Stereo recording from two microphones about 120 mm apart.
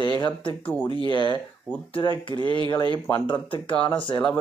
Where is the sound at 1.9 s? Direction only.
45° left (ahead or behind).